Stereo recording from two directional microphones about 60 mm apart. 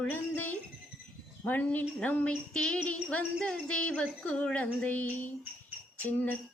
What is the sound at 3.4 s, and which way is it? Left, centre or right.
Music, centre.